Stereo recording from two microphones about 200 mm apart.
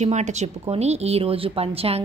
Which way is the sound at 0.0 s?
35° right (ahead or behind).